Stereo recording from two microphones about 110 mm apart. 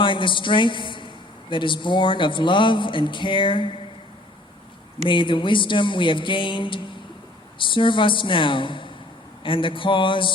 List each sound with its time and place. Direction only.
0.0 s a man's voice: 50° left (ahead or behind)
5.0 s a man's voice: 50° left (ahead or behind)